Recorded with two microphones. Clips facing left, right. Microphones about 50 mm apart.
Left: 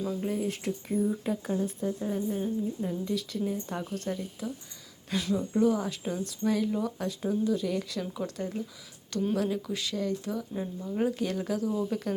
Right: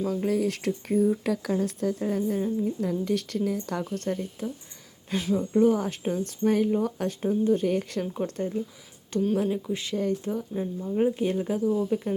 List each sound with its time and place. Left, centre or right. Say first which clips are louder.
0.1 s speech: right 5 dB; right
1.2 s speech: right 4 dB; right
1.6 s a woman's voice: right 4 dB; right
3.8 s speech: right 4 dB; right
7.2 s speech: right 5 dB; right
9.3 s speech: right 3 dB; right
10.5 s speech: right 4 dB; centre
11.2 s speech: right 4 dB; right